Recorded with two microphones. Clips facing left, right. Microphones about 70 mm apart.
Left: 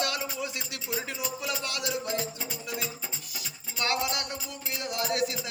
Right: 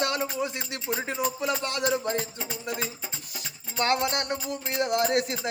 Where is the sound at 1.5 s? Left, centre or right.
Right.